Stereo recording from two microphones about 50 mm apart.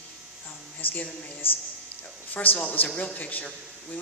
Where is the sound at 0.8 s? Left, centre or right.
Left.